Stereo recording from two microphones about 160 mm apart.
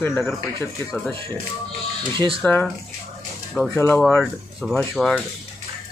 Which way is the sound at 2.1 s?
35° right (ahead or behind).